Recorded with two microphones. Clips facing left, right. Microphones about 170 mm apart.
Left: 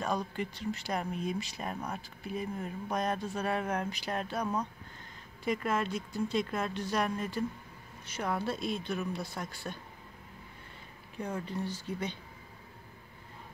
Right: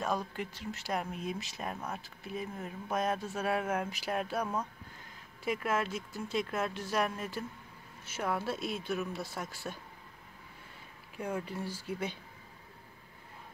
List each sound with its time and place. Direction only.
0.0 s speech: centre (ahead or behind)
11.1 s speech: 10° right (ahead or behind)